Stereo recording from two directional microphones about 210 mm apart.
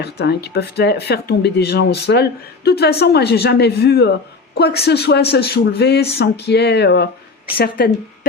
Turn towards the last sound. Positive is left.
turn(degrees=45)  # may be behind; listen again after turning